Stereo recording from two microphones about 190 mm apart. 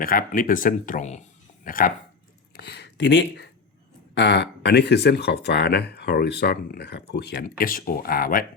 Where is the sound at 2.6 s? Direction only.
60° left (ahead or behind).